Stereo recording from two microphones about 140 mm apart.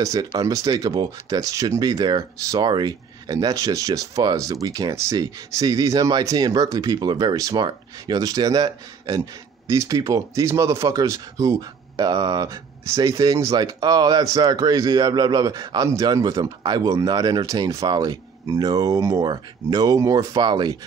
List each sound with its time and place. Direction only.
0.0 s speech: 25° right (ahead or behind)